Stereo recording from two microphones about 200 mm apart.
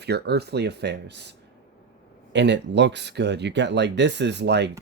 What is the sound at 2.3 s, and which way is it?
Speech, 60° right (ahead or behind).